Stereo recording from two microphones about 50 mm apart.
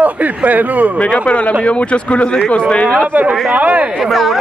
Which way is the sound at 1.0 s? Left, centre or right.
Left.